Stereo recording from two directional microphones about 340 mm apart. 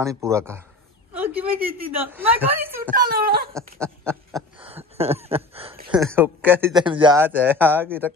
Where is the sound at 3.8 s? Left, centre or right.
Centre.